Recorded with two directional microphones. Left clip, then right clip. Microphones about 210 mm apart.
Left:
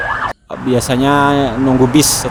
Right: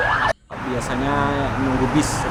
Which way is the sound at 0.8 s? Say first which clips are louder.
Left 9 dB; 40° left (ahead or behind).